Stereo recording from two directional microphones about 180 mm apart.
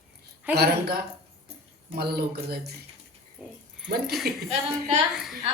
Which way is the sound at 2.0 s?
60° right (ahead or behind).